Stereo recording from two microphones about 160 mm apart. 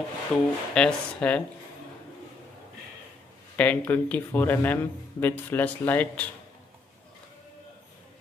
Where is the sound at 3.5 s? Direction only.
10° left (ahead or behind).